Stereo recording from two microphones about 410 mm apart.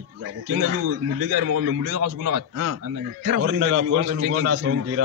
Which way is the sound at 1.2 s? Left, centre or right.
Right.